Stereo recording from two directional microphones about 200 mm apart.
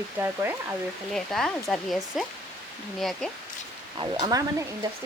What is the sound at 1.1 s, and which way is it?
Speech, centre (ahead or behind).